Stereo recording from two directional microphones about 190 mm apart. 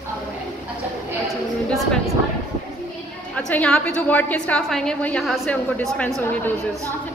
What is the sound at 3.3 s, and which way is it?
A woman's voice, 5° left (ahead or behind).